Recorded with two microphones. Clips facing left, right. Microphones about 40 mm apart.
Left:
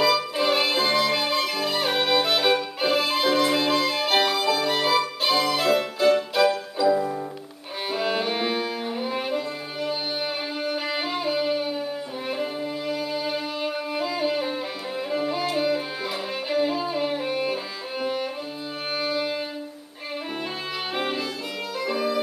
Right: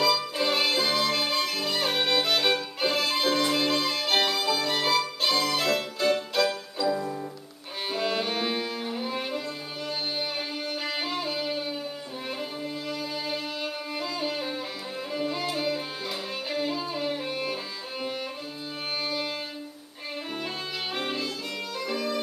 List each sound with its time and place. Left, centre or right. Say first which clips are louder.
0.0 s music: left 4 dB; centre
7.9 s violin: left 3 dB; centre
10.6 s music: left 6 dB; centre
12.3 s violin: left 6 dB; centre
15.0 s music: left 4 dB; centre
18.9 s music: left 5 dB; centre
20.9 s violin: left 4 dB; centre
21.9 s music: left 5 dB; centre